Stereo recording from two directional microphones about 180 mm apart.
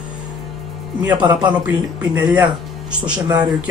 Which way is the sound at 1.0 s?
20° right (ahead or behind).